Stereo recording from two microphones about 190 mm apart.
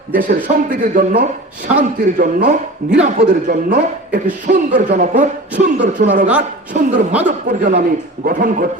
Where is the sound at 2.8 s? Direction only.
50° right (ahead or behind).